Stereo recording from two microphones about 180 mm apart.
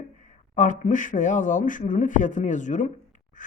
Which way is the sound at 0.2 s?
45° left (ahead or behind).